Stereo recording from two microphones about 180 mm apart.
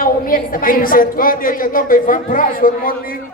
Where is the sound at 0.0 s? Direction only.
50° left (ahead or behind).